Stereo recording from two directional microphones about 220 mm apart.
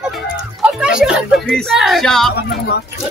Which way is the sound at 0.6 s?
5° right (ahead or behind).